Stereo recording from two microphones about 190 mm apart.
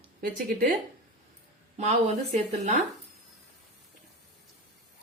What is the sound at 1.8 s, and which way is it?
Speech, 35° right (ahead or behind).